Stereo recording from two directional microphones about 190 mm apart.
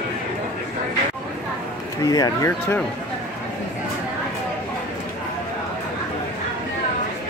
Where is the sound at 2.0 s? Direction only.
20° left (ahead or behind).